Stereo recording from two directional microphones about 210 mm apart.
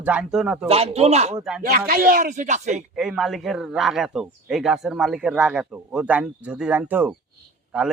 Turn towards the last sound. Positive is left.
turn(degrees=-5)  # may be behind; listen again after turning